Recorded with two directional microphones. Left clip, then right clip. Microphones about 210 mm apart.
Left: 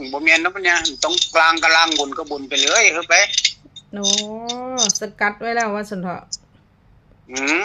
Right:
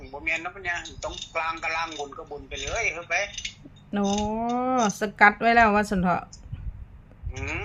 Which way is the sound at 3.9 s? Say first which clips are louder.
Left 6 dB; centre (ahead or behind).